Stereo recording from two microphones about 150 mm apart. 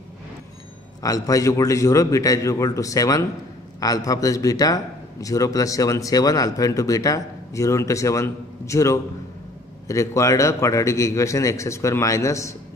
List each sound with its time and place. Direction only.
1.0 s a man's voice: 25° left (ahead or behind)